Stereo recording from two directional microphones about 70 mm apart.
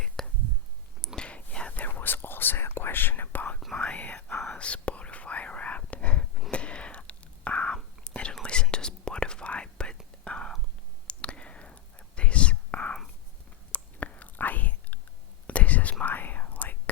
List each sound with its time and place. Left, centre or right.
0.2 s whispering: centre; by 3.6 s left
3.6 s whispering: centre